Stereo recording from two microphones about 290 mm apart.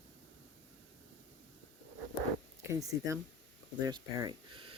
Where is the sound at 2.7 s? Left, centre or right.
Centre.